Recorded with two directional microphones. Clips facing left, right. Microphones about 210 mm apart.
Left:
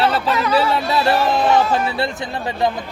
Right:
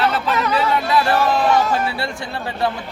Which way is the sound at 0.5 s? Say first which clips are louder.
Even; 25° left (ahead or behind).